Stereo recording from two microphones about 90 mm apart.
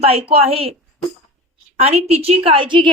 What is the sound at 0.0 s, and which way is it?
Speech, 90° right.